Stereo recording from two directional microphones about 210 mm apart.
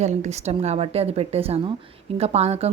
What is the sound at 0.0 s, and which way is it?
A woman's voice, 35° right (ahead or behind).